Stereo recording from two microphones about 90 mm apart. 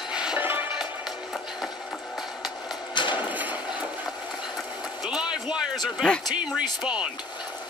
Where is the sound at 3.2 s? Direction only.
20° right (ahead or behind).